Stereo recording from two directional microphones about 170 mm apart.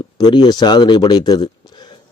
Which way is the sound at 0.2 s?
25° left (ahead or behind).